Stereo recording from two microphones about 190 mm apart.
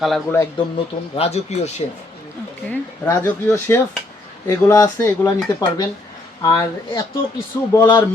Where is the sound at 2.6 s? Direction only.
10° left (ahead or behind).